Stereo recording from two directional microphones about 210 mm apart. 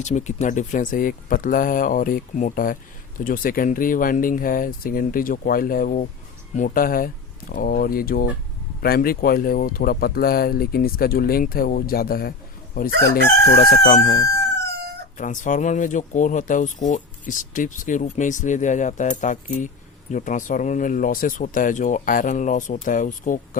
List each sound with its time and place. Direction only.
0.0 s speech: 35° left (ahead or behind)
13.4 s speech: 50° left (ahead or behind)
15.2 s speech: 35° left (ahead or behind)